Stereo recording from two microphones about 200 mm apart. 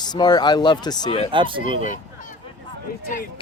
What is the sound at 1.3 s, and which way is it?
Speech, 25° right (ahead or behind).